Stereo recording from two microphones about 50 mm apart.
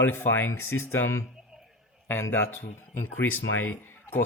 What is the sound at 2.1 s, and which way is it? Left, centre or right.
Speech, left.